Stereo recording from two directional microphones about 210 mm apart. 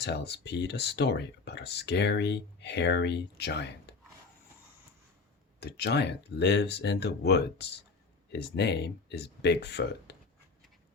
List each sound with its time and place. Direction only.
0.0 s speech: 50° left (ahead or behind)
5.5 s speech: 50° left (ahead or behind)